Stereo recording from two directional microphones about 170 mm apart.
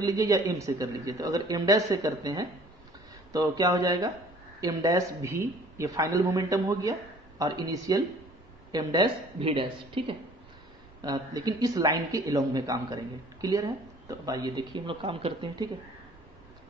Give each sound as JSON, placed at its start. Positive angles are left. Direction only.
{"t": 0.0, "sound": "a woman's voice", "side_deg": -20}